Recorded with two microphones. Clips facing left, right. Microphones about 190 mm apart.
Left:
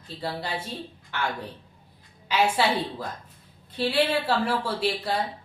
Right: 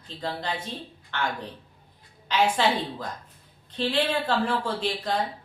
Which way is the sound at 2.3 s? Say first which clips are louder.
Even; 10° left (ahead or behind).